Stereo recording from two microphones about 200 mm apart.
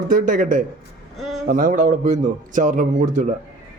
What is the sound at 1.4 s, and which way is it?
Speech, 45° right (ahead or behind).